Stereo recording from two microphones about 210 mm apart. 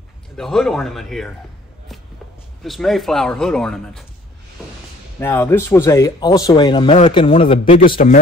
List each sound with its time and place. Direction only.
0.4 s speech: centre (ahead or behind)
2.6 s speech: centre (ahead or behind)
5.2 s speech: 10° left (ahead or behind); by 7.9 s 35° left (ahead or behind)